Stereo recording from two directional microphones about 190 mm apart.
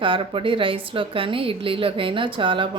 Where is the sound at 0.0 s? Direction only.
25° right (ahead or behind).